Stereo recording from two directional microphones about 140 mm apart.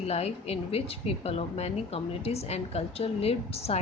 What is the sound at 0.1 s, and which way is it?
Speech, 50° left (ahead or behind).